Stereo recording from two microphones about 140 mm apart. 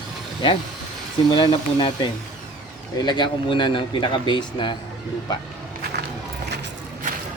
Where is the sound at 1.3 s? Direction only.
35° left (ahead or behind).